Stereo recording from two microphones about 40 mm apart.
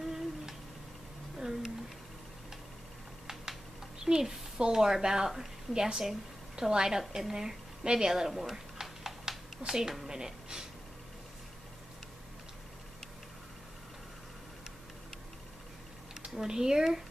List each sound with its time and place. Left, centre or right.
0.0 s humming: centre
1.4 s a sound: centre
4.0 s a woman's voice: centre
8.3 s typing: centre
9.7 s a woman's voice: centre
16.3 s a woman's voice: centre